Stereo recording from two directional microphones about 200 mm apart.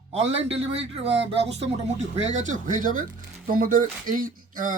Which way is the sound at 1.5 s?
35° right (ahead or behind).